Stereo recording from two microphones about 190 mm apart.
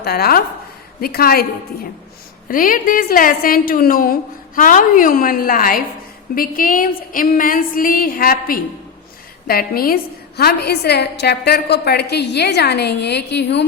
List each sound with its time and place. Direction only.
0.0 s a woman's voice: 55° left (ahead or behind)
2.5 s a woman's voice: 45° left (ahead or behind); by 13.7 s 65° left (ahead or behind)